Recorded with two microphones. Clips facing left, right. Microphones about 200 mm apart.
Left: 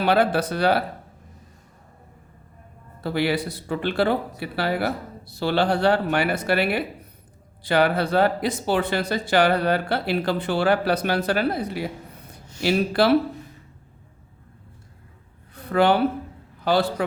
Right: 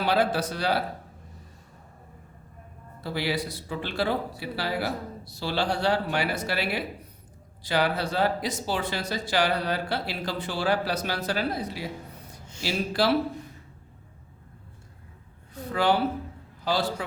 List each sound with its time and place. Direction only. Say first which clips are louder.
0.0 s speech: left 4 dB; 60° left (ahead or behind)
3.0 s speech: left 6 dB; 60° left (ahead or behind)
15.5 s a sound: left 5 dB; 60° left (ahead or behind)
16.6 s speech: left 6 dB; 60° left (ahead or behind)